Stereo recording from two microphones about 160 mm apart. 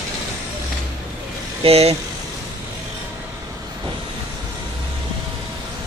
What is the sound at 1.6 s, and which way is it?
Speech, 40° right (ahead or behind).